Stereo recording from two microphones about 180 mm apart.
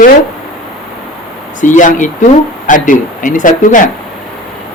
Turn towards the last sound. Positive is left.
turn(degrees=45)  # may be behind; listen again after turning